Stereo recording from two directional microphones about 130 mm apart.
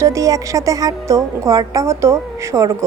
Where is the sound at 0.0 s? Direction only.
25° right (ahead or behind).